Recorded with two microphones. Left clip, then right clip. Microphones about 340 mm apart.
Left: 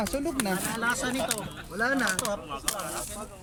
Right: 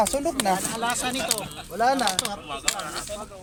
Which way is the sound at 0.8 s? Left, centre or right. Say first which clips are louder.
Right 2 dB; centre.